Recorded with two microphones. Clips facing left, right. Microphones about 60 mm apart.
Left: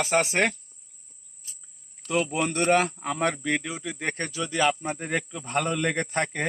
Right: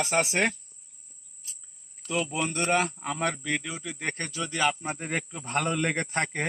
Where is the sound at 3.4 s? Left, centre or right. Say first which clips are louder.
Left 3 dB; left.